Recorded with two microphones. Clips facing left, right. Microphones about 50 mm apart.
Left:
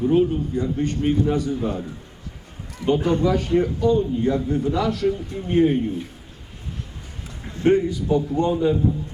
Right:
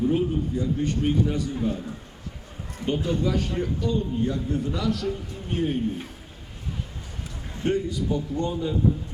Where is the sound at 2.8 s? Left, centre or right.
Left.